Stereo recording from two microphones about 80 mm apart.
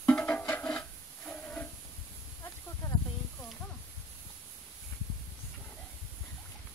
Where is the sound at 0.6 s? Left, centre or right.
Centre.